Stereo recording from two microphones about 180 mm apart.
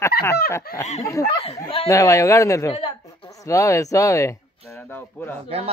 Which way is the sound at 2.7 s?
30° left (ahead or behind).